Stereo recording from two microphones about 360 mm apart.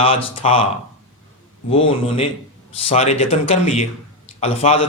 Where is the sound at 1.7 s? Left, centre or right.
Centre.